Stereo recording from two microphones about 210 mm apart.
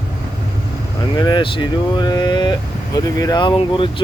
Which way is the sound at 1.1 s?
20° left (ahead or behind).